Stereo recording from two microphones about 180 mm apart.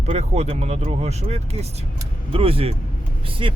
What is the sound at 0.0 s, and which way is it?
Speech, 35° right (ahead or behind).